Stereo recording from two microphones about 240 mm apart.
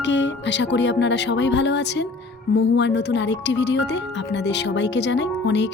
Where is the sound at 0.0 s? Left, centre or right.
Left.